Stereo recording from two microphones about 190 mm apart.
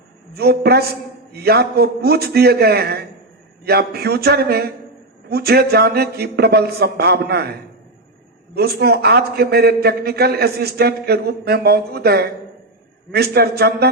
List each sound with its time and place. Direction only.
0.3 s a man's voice: 55° right (ahead or behind)
13.3 s a man's voice: 55° right (ahead or behind)